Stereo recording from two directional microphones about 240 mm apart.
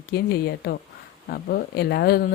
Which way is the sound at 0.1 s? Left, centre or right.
Left.